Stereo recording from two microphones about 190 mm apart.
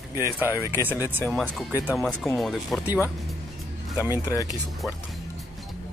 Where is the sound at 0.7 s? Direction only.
10° right (ahead or behind).